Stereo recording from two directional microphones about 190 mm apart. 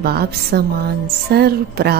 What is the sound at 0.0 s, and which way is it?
A woman's voice, 55° right (ahead or behind).